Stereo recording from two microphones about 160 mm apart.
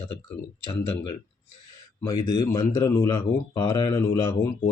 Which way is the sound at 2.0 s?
25° left (ahead or behind).